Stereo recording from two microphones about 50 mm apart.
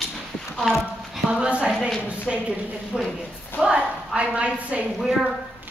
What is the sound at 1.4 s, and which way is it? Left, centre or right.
A woman's voice, right.